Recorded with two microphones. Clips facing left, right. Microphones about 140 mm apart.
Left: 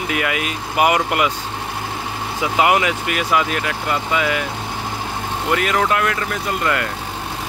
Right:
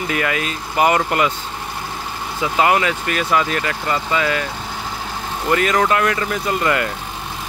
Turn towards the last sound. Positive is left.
turn(degrees=-5)  # may be behind; listen again after turning